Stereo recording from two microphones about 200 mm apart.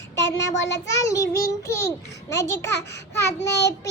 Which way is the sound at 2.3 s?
15° left (ahead or behind).